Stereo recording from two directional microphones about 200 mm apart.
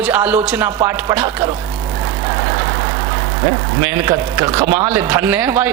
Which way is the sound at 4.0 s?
20° right (ahead or behind).